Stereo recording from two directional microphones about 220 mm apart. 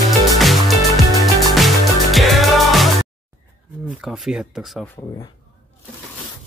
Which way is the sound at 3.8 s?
Centre (ahead or behind).